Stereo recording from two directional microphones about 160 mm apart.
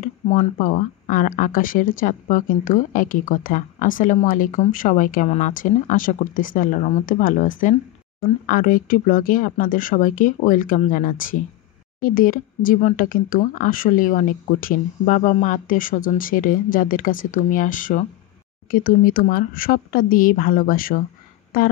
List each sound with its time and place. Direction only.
0.0 s speech: 55° left (ahead or behind)